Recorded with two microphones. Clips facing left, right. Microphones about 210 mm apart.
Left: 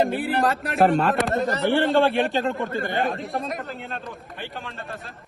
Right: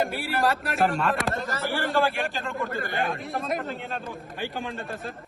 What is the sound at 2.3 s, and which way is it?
Speech, 30° left (ahead or behind).